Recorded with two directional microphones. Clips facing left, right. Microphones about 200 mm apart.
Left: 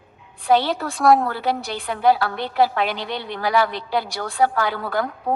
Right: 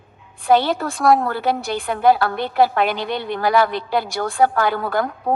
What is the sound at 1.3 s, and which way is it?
A woman's voice, 50° right (ahead or behind).